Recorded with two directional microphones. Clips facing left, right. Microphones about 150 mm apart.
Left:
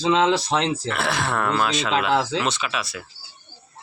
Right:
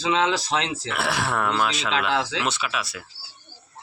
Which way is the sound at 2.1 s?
40° left (ahead or behind).